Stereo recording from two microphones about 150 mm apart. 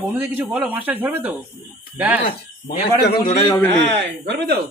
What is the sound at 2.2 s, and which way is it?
Speech, 85° left.